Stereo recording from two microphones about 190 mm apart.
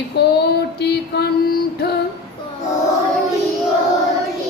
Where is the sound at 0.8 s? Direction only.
60° left (ahead or behind).